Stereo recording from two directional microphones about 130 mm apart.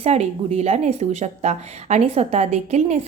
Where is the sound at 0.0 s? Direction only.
55° right (ahead or behind).